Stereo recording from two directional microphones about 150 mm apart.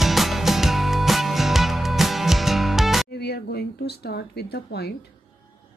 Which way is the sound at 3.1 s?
90° left.